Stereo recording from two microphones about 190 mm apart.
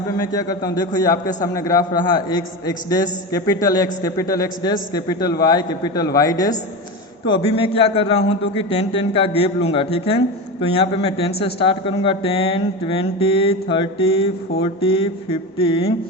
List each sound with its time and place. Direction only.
0.3 s a man's voice: 20° left (ahead or behind)